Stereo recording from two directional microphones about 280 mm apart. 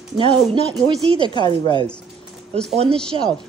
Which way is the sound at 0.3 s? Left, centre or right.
Centre.